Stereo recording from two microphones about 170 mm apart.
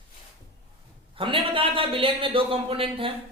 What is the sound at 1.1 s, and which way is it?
A man's voice, 30° right (ahead or behind).